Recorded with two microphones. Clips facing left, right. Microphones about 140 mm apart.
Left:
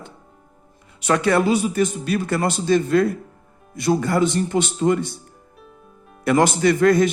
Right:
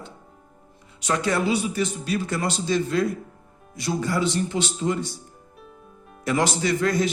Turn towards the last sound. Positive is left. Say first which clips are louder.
# left 7 dB
turn(degrees=55)  # may be behind; listen again after turning